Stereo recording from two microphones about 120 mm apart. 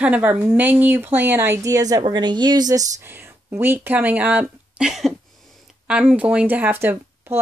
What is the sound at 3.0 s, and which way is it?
Speech, 20° right (ahead or behind).